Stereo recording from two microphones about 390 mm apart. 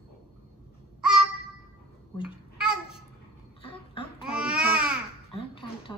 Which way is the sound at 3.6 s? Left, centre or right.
Centre.